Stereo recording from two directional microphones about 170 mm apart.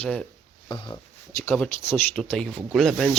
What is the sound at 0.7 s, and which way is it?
Speech, 25° left (ahead or behind).